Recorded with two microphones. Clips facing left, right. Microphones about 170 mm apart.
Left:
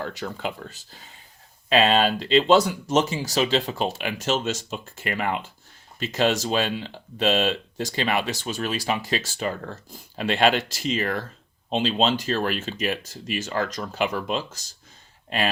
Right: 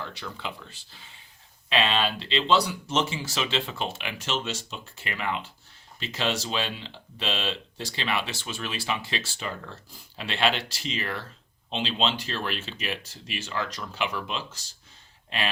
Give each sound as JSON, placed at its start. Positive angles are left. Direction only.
{"t": 0.0, "sound": "speech", "side_deg": 45}